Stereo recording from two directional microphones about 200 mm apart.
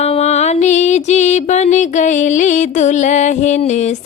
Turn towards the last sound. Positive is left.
turn(degrees=35)  # may be behind; listen again after turning